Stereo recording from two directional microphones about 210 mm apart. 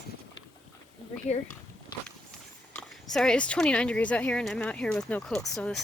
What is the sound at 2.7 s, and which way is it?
Speech, centre (ahead or behind).